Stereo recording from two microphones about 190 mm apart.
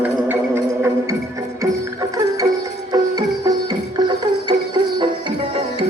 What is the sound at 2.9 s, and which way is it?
Music, 20° right (ahead or behind).